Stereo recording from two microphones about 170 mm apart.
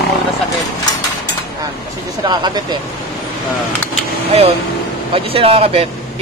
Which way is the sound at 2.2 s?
25° right (ahead or behind).